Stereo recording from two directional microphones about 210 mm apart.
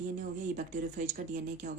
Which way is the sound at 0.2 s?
40° right (ahead or behind).